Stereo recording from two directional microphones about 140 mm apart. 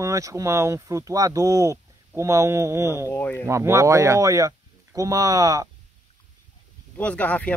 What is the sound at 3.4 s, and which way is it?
Speech, 20° right (ahead or behind).